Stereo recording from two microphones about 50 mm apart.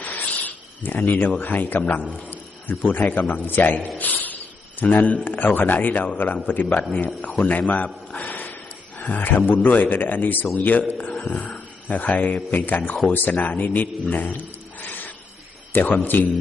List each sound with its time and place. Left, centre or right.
0.0 s snake: left
1.4 s a man's voice: left
3.9 s snake: left
4.8 s a man's voice: left
8.1 s a sound: left
9.0 s a man's voice: left
14.8 s wild animals: left
15.7 s a man's voice: left